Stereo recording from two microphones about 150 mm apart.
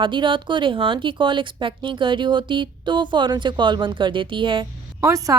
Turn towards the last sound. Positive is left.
turn(degrees=-20)  # may be behind; listen again after turning